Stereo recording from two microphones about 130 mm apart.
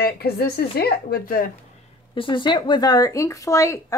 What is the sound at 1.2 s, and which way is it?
Speech, 90° left.